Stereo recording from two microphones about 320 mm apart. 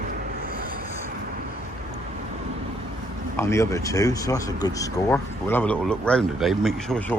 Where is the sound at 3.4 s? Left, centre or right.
Centre.